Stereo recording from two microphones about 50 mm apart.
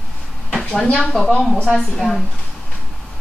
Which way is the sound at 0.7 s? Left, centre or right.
Centre.